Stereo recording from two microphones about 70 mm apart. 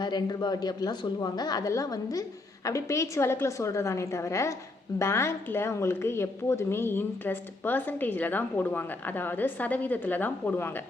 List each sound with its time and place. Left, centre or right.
0.0 s speech: left
1.7 s a woman's voice: left
2.6 s a woman's voice: left